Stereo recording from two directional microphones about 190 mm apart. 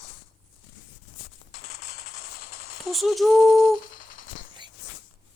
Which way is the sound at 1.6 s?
50° left (ahead or behind).